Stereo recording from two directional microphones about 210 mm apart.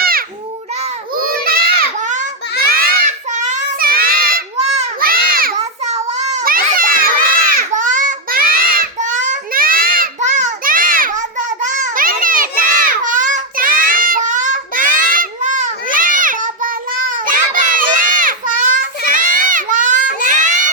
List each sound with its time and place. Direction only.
0.0 s babbling: 45° right (ahead or behind)
1.1 s children playing: 45° right (ahead or behind)
2.7 s child singing: 40° right (ahead or behind)
4.9 s children playing: 45° right (ahead or behind)
16.2 s child singing: 40° right (ahead or behind)
17.2 s children playing: 40° right (ahead or behind)
19.5 s baby cry: 40° right (ahead or behind)